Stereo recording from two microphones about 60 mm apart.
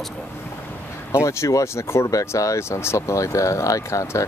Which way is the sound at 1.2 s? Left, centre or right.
Left.